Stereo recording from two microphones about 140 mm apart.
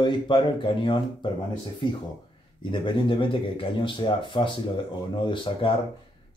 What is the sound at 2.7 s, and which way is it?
Speech, 35° left (ahead or behind).